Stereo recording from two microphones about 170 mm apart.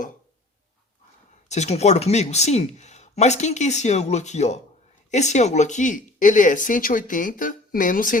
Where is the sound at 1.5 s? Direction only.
40° left (ahead or behind).